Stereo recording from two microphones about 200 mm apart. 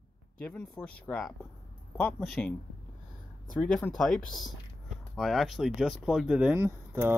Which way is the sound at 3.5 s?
5° left (ahead or behind).